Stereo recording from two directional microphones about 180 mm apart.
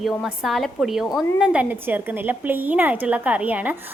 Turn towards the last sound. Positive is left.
turn(degrees=-10)  # may be behind; listen again after turning